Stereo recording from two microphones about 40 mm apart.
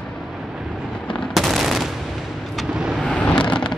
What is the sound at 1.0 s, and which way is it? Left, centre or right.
Machine gun, centre.